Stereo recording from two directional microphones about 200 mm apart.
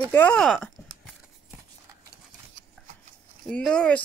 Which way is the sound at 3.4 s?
5° left (ahead or behind).